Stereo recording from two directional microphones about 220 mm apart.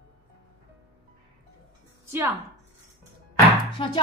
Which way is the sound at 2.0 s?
10° right (ahead or behind).